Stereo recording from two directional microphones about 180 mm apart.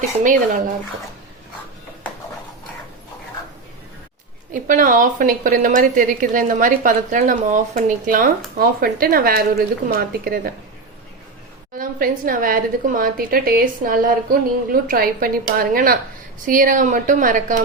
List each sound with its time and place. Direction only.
0.2 s a woman's voice: 45° right (ahead or behind)
4.5 s a woman's voice: 50° right (ahead or behind)
11.7 s a woman's voice: 55° right (ahead or behind)